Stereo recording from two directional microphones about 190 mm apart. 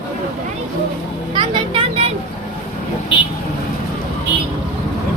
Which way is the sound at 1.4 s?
30° right (ahead or behind).